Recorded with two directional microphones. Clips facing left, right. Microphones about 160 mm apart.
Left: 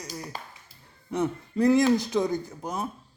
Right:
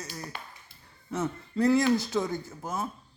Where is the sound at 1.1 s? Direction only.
15° left (ahead or behind).